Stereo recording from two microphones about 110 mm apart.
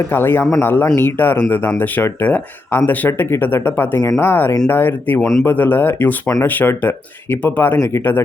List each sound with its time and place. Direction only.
0.1 s speech: 20° left (ahead or behind)